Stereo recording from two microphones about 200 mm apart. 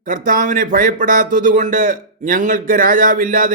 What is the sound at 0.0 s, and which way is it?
A man's voice, 45° right (ahead or behind).